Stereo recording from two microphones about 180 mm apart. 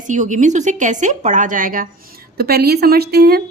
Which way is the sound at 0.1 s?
45° right (ahead or behind).